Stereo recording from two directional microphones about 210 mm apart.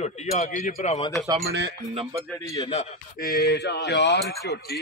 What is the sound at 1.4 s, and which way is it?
Speech, 55° right (ahead or behind).